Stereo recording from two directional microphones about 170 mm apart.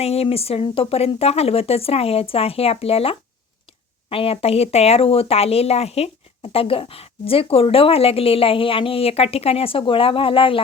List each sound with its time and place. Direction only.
0.0 s speech: 35° left (ahead or behind)